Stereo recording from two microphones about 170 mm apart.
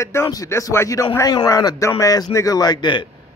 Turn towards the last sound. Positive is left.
turn(degrees=30)  # may be behind; listen again after turning